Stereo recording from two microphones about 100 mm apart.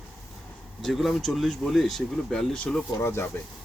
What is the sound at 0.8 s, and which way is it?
Speech, centre (ahead or behind).